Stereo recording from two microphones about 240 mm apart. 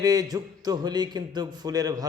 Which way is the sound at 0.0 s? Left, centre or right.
Centre.